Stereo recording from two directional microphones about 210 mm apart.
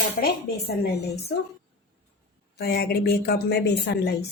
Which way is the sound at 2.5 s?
50° left (ahead or behind).